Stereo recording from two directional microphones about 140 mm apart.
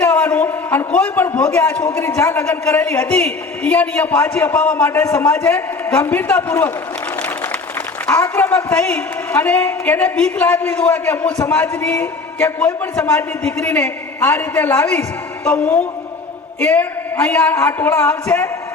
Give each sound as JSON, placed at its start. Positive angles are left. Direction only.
{"t": 0.0, "sound": "a man's voice", "side_deg": 15}
{"t": 8.0, "sound": "a man's voice", "side_deg": 15}